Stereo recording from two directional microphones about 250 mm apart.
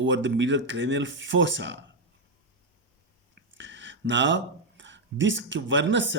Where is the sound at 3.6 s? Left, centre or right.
Right.